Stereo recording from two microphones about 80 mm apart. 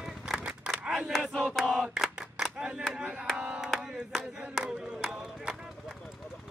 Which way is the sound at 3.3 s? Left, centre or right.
Centre.